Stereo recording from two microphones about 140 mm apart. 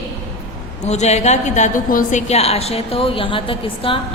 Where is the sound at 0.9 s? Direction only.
50° left (ahead or behind).